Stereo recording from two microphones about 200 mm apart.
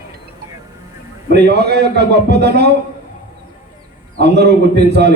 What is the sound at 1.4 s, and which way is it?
A man's voice, 55° right (ahead or behind).